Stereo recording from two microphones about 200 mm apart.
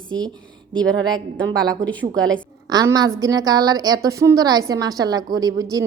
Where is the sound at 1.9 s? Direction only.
5° left (ahead or behind).